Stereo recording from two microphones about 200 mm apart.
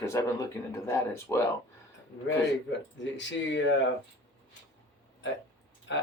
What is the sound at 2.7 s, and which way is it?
Speech, 65° left (ahead or behind).